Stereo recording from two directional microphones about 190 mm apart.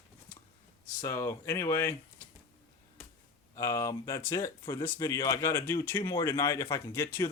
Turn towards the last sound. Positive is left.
turn(degrees=15)  # may be behind; listen again after turning